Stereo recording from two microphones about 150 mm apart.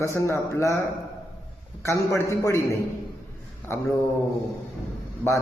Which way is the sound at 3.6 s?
10° left (ahead or behind).